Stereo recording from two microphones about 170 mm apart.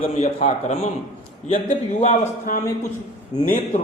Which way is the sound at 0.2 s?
40° left (ahead or behind).